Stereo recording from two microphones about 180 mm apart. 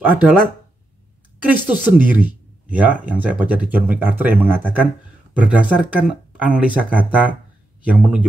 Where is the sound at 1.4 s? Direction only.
10° right (ahead or behind).